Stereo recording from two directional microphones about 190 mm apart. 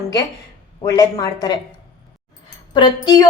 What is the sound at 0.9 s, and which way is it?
Speech, 20° left (ahead or behind).